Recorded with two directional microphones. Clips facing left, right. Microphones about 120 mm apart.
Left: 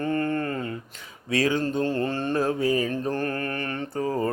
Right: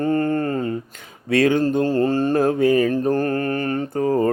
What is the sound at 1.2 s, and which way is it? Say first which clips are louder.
Speech: right 7 dB; 60° right (ahead or behind).